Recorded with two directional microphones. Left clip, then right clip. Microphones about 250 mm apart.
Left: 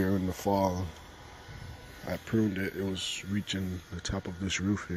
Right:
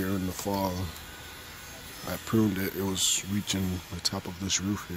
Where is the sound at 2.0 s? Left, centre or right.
Centre.